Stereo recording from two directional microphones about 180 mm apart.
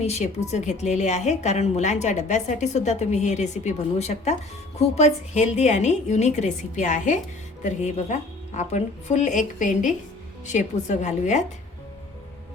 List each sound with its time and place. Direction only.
0.0 s a woman's voice: 40° left (ahead or behind)